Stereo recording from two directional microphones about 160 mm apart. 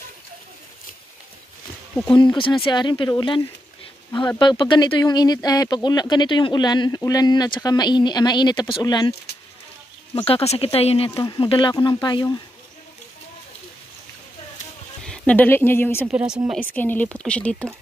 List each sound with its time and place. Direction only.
2.3 s speech: 30° left (ahead or behind)
10.1 s speech: 35° left (ahead or behind)
11.1 s speech: 20° left (ahead or behind)
11.4 s speech: 30° left (ahead or behind)
15.0 s speech: 10° left (ahead or behind)
16.1 s speech: 5° right (ahead or behind)
16.5 s speech: 10° left (ahead or behind)